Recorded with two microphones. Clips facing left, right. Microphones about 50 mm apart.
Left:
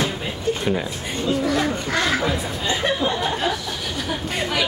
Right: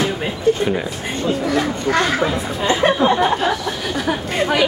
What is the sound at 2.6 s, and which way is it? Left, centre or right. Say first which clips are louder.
Chatter: right 8 dB; right.